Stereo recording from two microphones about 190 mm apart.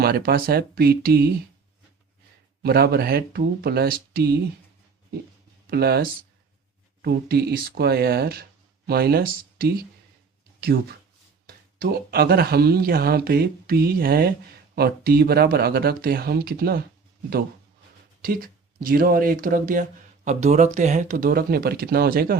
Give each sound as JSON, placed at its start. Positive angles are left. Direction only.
{"t": 0.0, "sound": "speech", "side_deg": -55}
{"t": 2.6, "sound": "speech", "side_deg": -55}
{"t": 5.6, "sound": "speech", "side_deg": -55}
{"t": 11.4, "sound": "speech", "side_deg": -50}
{"t": 18.2, "sound": "speech", "side_deg": -50}